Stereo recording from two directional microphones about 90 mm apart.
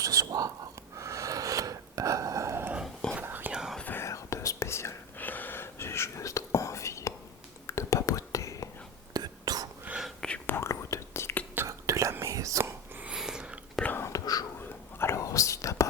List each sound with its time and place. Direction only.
0.0 s whispering: 40° right (ahead or behind)
0.9 s a sound: 35° right (ahead or behind)
3.2 s whispering: 20° right (ahead or behind)
3.5 s whispering: 10° right (ahead or behind)
4.0 s whispering: 35° left (ahead or behind)
5.2 s whispering: 20° left (ahead or behind); by 8.7 s 35° left (ahead or behind)
9.1 s whispering: 50° right (ahead or behind)
10.2 s whispering: 10° left (ahead or behind)
10.4 s whispering: 25° left (ahead or behind)
11.5 s whispering: 35° right (ahead or behind)
13.0 s a sound: 10° right (ahead or behind)
13.8 s whispering: 25° left (ahead or behind)
14.1 s whispering: 45° left (ahead or behind)
14.9 s whispering: 30° left (ahead or behind)